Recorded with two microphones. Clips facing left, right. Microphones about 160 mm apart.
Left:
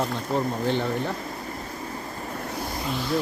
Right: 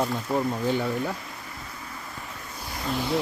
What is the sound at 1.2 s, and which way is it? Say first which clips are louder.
Waves: left 7 dB; 40° left (ahead or behind).